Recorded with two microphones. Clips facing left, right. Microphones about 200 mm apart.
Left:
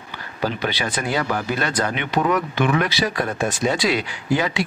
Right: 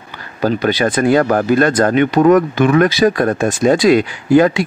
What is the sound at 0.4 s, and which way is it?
Speech, 45° right (ahead or behind).